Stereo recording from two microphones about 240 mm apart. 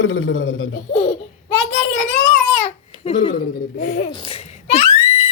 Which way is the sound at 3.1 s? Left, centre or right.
Left.